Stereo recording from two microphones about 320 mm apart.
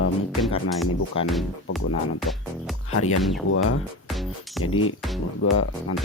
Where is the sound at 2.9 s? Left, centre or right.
Left.